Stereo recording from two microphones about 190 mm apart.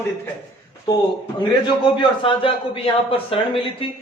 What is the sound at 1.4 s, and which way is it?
A man's voice, 25° left (ahead or behind).